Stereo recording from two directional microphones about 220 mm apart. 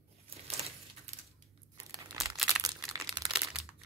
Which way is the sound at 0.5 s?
30° right (ahead or behind).